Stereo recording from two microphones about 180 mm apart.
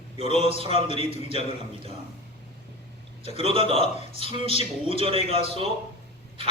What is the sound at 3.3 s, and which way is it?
A man's voice, 30° right (ahead or behind).